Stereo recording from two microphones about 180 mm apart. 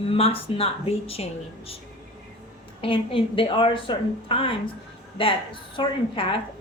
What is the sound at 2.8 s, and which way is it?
A woman's voice, 30° left (ahead or behind).